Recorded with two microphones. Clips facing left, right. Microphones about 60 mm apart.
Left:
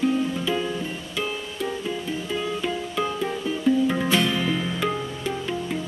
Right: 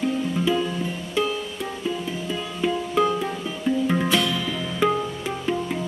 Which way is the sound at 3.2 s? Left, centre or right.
Centre.